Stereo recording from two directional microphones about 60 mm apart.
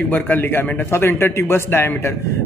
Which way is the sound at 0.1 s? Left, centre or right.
Left.